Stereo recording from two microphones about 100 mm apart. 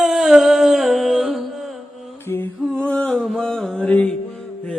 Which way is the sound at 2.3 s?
30° left (ahead or behind).